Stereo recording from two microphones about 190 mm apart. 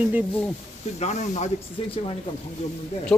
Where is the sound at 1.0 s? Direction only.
40° left (ahead or behind).